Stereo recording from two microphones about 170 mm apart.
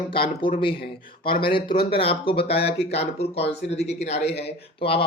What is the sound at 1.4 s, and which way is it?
Speech, 30° left (ahead or behind).